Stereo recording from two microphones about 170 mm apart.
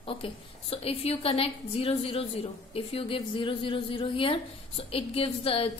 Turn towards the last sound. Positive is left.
turn(degrees=35)  # may be behind; listen again after turning